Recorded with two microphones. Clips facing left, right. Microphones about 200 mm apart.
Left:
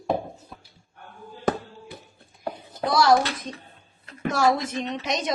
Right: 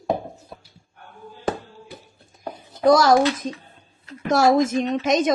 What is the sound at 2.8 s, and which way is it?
Speech, 45° right (ahead or behind).